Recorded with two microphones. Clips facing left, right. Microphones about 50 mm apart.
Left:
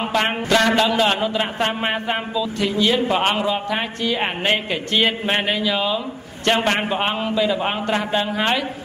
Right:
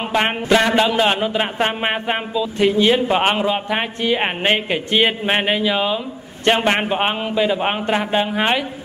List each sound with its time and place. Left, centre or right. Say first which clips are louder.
0.1 s a man's voice: right 3 dB; centre